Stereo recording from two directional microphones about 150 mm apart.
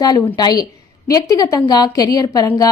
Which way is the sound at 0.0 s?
25° left (ahead or behind).